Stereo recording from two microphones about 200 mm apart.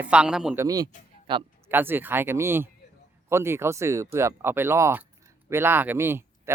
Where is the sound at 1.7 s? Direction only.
10° right (ahead or behind).